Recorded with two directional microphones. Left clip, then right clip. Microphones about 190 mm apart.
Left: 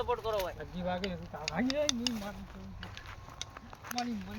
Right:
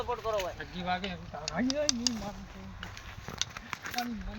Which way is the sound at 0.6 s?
60° left (ahead or behind).